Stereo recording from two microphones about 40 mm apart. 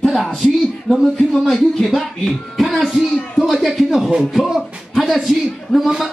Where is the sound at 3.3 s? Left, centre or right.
Centre.